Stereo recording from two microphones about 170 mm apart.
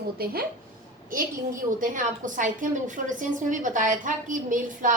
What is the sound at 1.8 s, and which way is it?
A woman's voice, 50° right (ahead or behind).